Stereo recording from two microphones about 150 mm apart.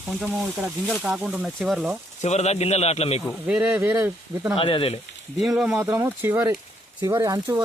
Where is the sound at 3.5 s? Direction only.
5° right (ahead or behind).